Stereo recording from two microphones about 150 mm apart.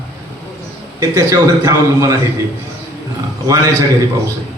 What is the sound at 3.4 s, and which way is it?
Speech, 20° right (ahead or behind).